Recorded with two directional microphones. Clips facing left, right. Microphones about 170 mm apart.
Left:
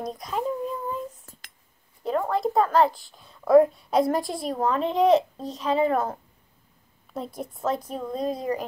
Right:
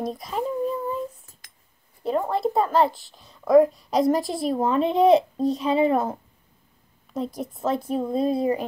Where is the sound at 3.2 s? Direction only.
Centre (ahead or behind).